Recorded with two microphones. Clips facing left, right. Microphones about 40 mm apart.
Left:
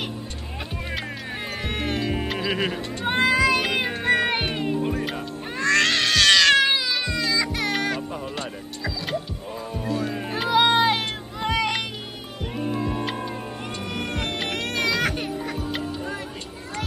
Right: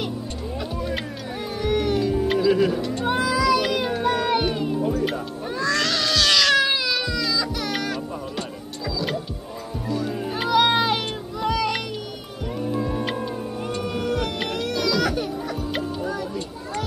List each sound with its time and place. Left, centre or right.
1.6 s music: left
2.5 s speech: left
3.1 s cat: left
3.7 s music: left
10.5 s music: left
12.7 s music: left
13.8 s a sound: left
14.5 s music: left